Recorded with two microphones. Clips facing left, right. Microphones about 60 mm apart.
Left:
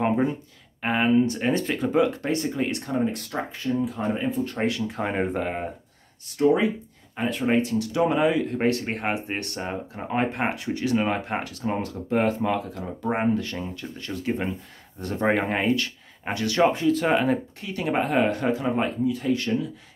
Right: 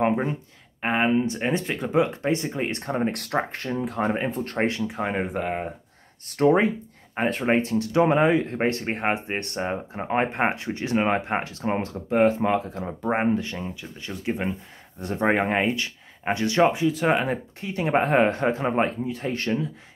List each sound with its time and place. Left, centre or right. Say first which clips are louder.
0.8 s speech: left 1 dB; centre
2.7 s speech: even; right
3.1 s speech: right 4 dB; right
4.6 s speech: right 5 dB; right
4.8 s speech: left 1 dB; centre
6.2 s speech: right 1 dB; right
12.1 s speech: right 3 dB; centre
12.4 s speech: right 2 dB; right
13.6 s speech: left 1 dB; centre
16.6 s speech: left 1 dB; centre
17.6 s speech: right 2 dB; right